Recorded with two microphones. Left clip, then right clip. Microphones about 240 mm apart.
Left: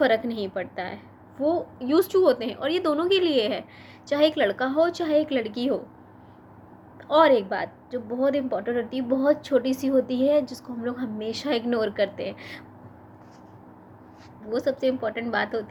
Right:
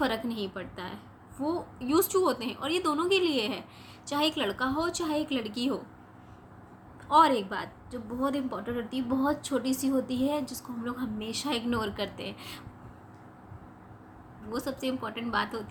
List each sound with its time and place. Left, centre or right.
0.0 s a woman's voice: centre
7.1 s a woman's voice: centre
14.5 s a woman's voice: centre